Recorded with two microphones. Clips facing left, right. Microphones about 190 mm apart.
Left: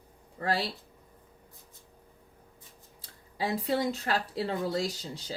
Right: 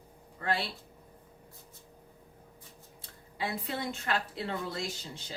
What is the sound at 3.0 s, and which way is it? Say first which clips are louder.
Speech: left 3 dB; 35° left (ahead or behind).